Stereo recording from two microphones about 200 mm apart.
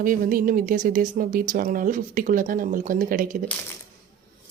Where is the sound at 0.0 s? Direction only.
45° right (ahead or behind).